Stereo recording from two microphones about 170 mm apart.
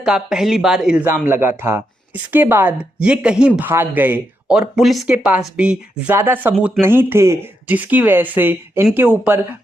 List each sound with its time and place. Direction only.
0.0 s speech: 5° right (ahead or behind)
1.0 s speech: 15° right (ahead or behind)